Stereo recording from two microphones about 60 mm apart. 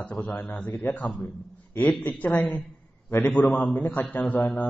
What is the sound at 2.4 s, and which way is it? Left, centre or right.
A man's voice, left.